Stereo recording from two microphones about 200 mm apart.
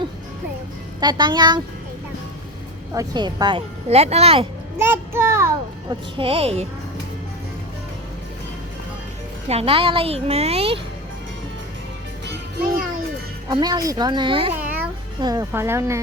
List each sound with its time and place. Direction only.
0.9 s speech: 20° right (ahead or behind)
2.9 s speech: 20° right (ahead or behind)
4.8 s a sound: 10° right (ahead or behind)
6.1 s speech: 30° right (ahead or behind)
9.5 s speech: 30° right (ahead or behind)
13.5 s speech: 20° right (ahead or behind)
14.5 s babbling: 5° right (ahead or behind)
15.2 s speech: 15° right (ahead or behind)